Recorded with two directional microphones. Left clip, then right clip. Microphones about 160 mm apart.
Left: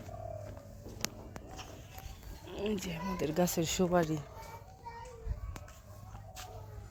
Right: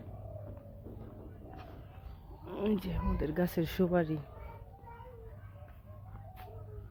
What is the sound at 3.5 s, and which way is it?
Speech, 15° right (ahead or behind).